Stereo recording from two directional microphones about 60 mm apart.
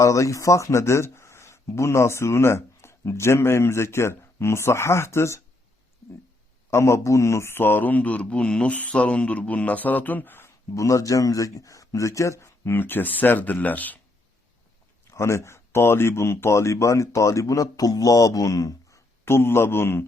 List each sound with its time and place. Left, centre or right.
0.0 s speech: left
6.7 s speech: left
10.8 s speech: left
12.6 s speech: left
15.1 s speech: left
19.2 s speech: left